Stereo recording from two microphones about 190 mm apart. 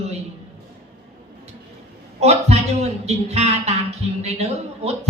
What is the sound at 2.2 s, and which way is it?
A man's voice, 35° right (ahead or behind).